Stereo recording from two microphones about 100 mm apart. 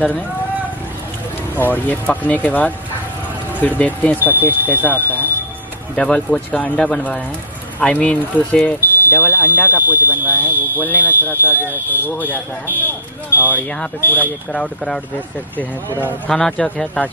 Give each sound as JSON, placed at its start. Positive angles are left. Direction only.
{"t": 1.6, "sound": "speech", "side_deg": 15}
{"t": 10.0, "sound": "speech", "side_deg": -20}
{"t": 10.4, "sound": "speech", "side_deg": 20}
{"t": 11.5, "sound": "speech", "side_deg": -20}
{"t": 13.5, "sound": "speech", "side_deg": 20}
{"t": 16.3, "sound": "speech", "side_deg": 5}